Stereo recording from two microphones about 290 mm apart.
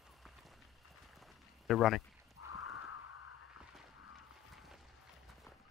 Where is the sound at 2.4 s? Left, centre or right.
Left.